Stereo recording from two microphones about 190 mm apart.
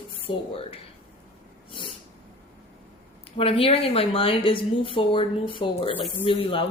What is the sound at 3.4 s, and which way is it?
A woman's voice, 30° left (ahead or behind).